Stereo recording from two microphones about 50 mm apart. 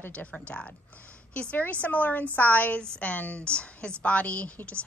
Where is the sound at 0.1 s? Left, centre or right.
Left.